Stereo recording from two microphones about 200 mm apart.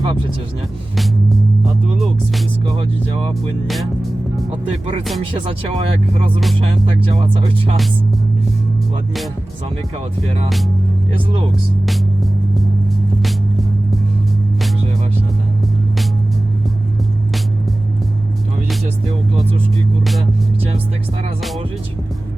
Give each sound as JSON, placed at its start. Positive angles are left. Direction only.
{"t": 0.0, "sound": "speech", "side_deg": -25}
{"t": 0.9, "sound": "speech", "side_deg": 0}
{"t": 2.6, "sound": "speech", "side_deg": -20}
{"t": 5.5, "sound": "speech", "side_deg": -30}
{"t": 11.9, "sound": "music", "side_deg": 0}